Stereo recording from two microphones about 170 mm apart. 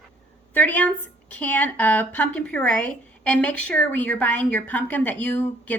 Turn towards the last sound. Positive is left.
turn(degrees=10)  # may be behind; listen again after turning